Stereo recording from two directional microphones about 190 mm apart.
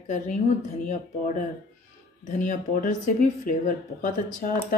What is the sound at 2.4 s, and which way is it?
Speech, 45° left (ahead or behind).